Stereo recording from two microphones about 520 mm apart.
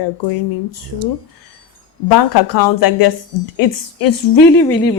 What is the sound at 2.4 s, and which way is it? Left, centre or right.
A woman's voice, left.